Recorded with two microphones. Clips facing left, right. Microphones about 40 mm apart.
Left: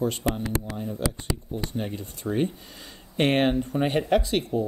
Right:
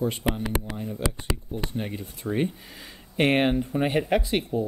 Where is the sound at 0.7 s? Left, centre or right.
Centre.